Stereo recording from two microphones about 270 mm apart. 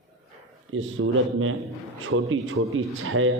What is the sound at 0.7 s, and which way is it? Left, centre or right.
Speech, right.